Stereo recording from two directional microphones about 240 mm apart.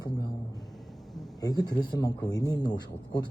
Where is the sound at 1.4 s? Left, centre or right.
Centre.